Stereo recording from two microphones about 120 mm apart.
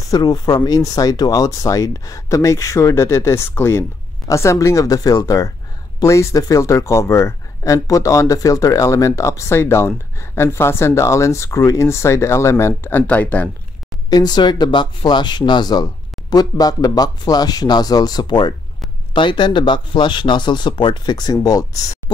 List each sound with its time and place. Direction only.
0.1 s speech: 35° left (ahead or behind); by 13.5 s 15° left (ahead or behind)
14.1 s speech: 35° left (ahead or behind)